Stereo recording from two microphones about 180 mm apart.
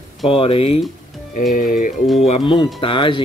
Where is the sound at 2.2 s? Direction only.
30° left (ahead or behind).